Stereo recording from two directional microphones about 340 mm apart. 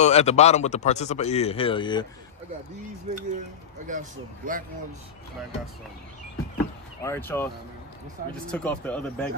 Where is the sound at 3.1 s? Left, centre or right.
Centre.